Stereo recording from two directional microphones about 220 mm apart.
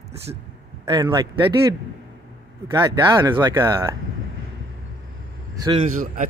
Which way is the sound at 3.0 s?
20° right (ahead or behind).